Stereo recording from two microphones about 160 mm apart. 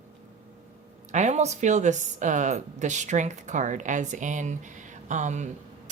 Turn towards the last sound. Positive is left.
turn(degrees=-50)  # may be behind; listen again after turning